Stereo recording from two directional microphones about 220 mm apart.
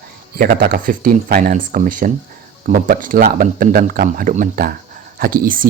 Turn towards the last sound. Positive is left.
turn(degrees=-40)  # may be behind; listen again after turning